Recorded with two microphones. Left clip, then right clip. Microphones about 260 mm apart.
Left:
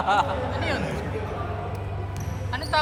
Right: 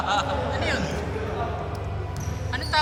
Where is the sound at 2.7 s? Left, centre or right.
Centre.